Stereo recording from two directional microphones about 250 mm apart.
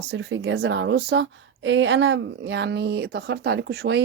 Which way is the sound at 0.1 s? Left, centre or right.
Right.